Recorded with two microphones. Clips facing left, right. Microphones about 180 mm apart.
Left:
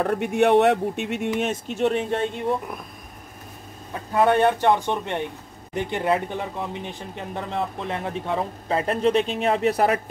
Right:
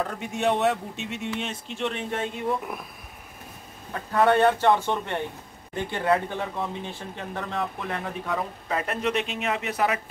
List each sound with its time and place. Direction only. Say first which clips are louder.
0.0 s speech: left 6 dB; 60° left (ahead or behind); by 2.2 s 35° left (ahead or behind)
3.9 s speech: left 1 dB; 15° left (ahead or behind); by 9.9 s 40° left (ahead or behind)